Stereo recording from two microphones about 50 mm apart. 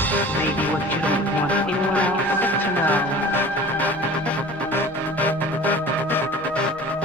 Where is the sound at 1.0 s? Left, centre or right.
Left.